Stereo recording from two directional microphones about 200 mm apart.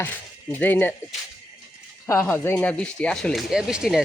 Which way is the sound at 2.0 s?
10° left (ahead or behind).